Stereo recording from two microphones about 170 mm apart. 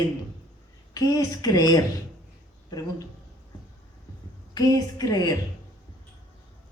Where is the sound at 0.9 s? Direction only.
20° left (ahead or behind).